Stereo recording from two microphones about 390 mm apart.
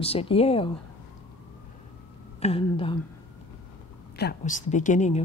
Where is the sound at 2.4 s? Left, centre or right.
Centre.